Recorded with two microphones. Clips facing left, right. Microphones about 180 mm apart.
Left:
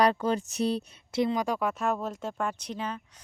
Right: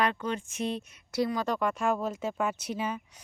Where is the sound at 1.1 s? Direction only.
20° left (ahead or behind).